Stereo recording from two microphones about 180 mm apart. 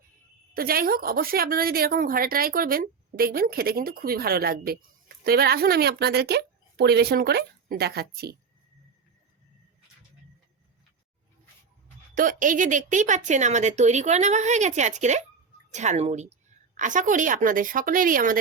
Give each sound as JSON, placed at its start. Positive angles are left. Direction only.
{"t": 0.5, "sound": "a woman's voice", "side_deg": -55}
{"t": 12.1, "sound": "a woman's voice", "side_deg": -50}